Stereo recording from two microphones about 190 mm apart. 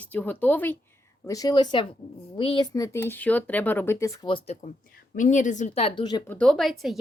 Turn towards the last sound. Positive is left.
turn(degrees=0)  # may be behind; listen again after turning